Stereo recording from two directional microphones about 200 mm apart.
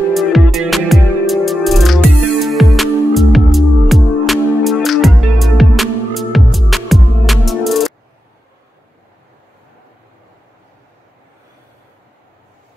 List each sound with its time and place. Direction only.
0.1 s music: centre (ahead or behind)